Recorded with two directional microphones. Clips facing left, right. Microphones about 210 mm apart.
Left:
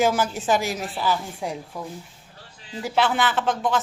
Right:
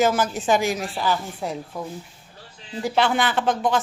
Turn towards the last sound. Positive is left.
turn(degrees=0)  # may be behind; listen again after turning